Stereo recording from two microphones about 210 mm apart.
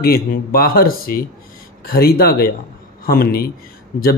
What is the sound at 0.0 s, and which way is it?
Speech, 45° left (ahead or behind).